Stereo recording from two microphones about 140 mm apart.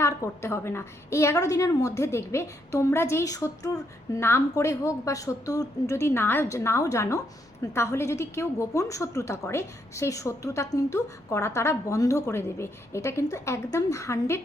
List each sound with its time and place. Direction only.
0.0 s a woman's voice: 20° left (ahead or behind)